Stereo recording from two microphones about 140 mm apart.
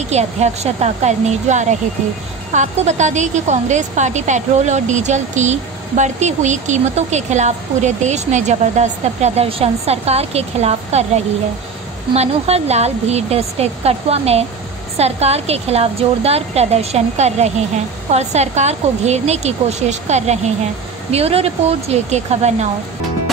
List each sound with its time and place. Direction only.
0.1 s a woman's voice: 50° right (ahead or behind)
12.1 s a woman's voice: 45° right (ahead or behind)